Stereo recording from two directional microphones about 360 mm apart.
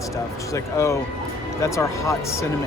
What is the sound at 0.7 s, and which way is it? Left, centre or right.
Speech, centre.